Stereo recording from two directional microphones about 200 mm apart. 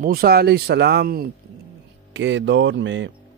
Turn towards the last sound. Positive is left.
turn(degrees=-65)  # may be behind; listen again after turning